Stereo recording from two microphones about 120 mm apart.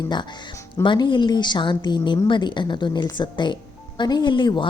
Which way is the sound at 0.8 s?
40° left (ahead or behind).